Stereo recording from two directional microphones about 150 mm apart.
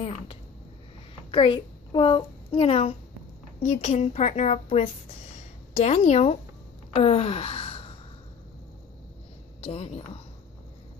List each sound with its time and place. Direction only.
1.3 s a child's voice: 35° left (ahead or behind)
6.9 s a sound: 40° left (ahead or behind)
9.6 s a woman's voice: 40° left (ahead or behind)